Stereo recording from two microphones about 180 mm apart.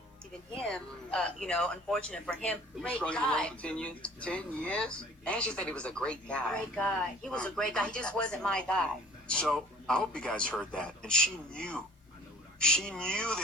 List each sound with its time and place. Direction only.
0.5 s speech: 5° left (ahead or behind)